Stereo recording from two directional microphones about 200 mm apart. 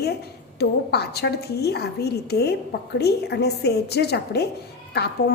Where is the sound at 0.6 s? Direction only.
55° left (ahead or behind).